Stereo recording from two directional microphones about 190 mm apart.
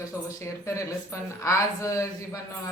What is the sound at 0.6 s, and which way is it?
A man's voice, 15° left (ahead or behind).